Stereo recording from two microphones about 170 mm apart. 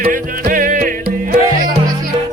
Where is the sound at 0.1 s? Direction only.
55° right (ahead or behind).